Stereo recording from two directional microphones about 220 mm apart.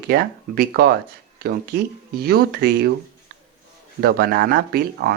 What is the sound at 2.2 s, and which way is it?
Speech, 45° right (ahead or behind).